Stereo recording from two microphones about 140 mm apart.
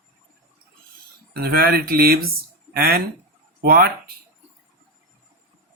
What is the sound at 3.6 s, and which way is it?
Speech, 90° right.